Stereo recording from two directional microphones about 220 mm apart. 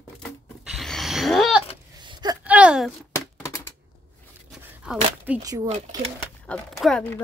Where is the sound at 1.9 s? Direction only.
20° right (ahead or behind).